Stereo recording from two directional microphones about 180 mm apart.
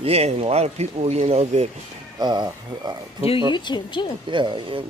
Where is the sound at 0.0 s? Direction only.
35° right (ahead or behind).